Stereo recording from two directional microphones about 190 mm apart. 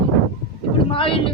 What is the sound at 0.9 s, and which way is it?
Speech, 30° left (ahead or behind).